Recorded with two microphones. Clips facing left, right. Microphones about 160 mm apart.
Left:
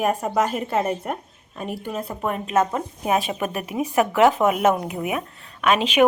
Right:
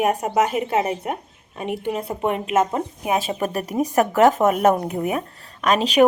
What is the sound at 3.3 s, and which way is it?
Speech, 35° right (ahead or behind).